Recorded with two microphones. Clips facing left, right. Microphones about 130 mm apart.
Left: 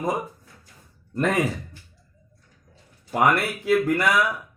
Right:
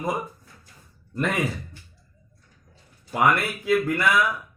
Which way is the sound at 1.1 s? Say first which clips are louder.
Left 3 dB; 40° left (ahead or behind).